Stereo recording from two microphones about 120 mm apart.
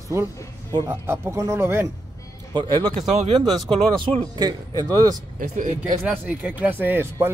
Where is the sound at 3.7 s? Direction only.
50° right (ahead or behind).